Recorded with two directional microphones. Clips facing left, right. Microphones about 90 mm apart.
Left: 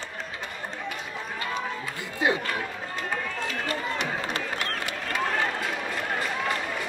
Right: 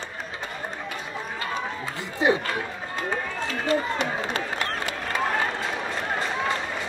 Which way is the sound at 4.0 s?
35° right (ahead or behind).